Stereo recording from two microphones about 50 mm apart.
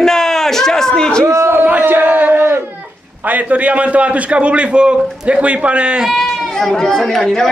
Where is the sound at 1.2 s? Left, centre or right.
Right.